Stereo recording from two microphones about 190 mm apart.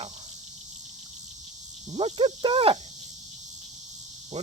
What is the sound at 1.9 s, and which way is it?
Speech, 30° right (ahead or behind).